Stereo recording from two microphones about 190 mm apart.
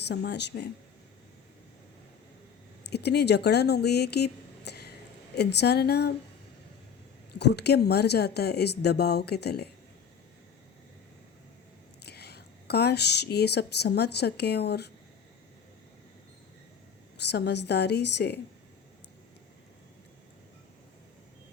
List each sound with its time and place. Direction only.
0.1 s speech: 60° left (ahead or behind)
2.9 s speech: 60° left (ahead or behind)
7.3 s speech: 60° left (ahead or behind)
12.0 s speech: 60° left (ahead or behind)
17.2 s speech: 65° left (ahead or behind)